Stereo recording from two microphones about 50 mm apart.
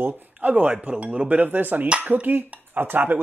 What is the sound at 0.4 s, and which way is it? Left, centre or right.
Speech, right.